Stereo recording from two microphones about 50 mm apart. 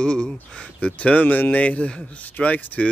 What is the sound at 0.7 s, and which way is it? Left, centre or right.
Speech, left.